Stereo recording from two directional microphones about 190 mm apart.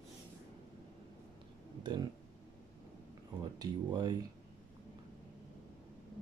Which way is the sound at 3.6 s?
25° right (ahead or behind).